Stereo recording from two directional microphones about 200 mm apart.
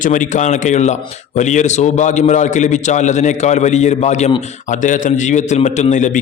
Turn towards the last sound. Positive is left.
turn(degrees=40)  # may be behind; listen again after turning